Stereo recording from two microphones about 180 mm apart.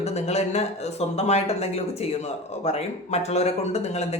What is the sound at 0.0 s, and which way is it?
Speech, 35° left (ahead or behind).